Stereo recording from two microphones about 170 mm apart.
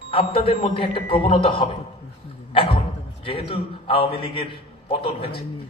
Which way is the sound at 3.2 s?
35° left (ahead or behind).